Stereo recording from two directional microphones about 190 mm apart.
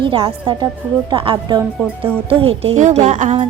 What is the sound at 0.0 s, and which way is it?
A woman's voice, 25° right (ahead or behind).